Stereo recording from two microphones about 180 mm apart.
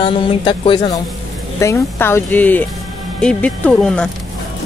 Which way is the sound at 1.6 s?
15° left (ahead or behind).